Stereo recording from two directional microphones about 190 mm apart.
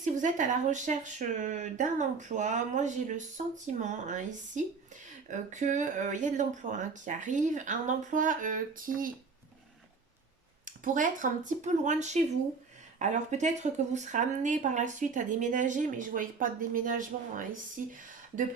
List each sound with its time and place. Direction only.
0.0 s speech: 40° right (ahead or behind)
10.7 s speech: 45° right (ahead or behind)